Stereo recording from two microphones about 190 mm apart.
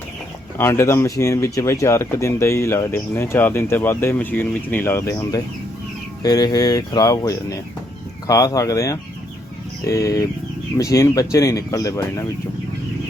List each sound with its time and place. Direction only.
0.6 s speech: 15° left (ahead or behind)